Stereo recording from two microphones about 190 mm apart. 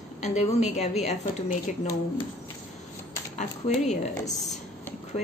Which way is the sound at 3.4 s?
40° left (ahead or behind).